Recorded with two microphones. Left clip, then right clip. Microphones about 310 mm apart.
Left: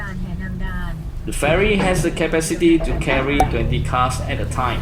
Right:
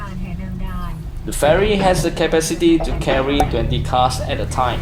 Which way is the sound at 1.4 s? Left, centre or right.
Right.